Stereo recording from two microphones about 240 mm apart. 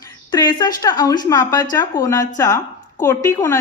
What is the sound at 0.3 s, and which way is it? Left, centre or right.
Speech, centre.